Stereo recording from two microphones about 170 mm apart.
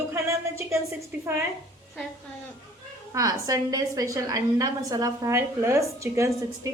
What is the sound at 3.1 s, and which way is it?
A woman's voice, 20° right (ahead or behind).